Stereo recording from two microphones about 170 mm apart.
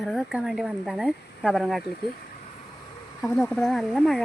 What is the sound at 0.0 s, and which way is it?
Speech, centre (ahead or behind).